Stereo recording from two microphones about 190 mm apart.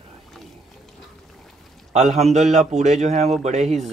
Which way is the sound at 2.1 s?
35° right (ahead or behind).